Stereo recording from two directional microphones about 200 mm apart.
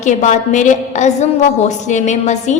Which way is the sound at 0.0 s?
40° left (ahead or behind).